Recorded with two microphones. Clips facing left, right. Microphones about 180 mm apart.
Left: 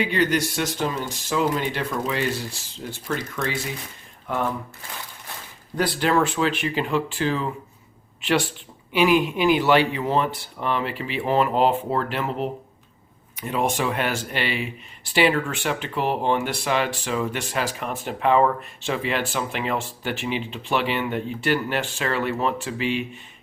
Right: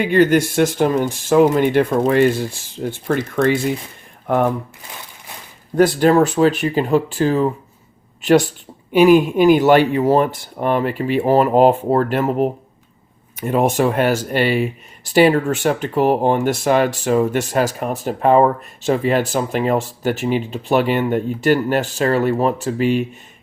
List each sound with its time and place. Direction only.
0.0 s speech: 50° right (ahead or behind)
5.7 s speech: 45° right (ahead or behind)